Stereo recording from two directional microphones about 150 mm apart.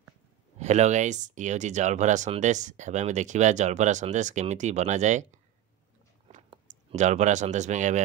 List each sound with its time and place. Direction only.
0.6 s speech: 50° right (ahead or behind)
6.9 s speech: 50° right (ahead or behind)